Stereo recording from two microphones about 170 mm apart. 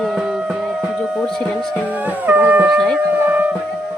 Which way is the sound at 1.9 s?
10° right (ahead or behind).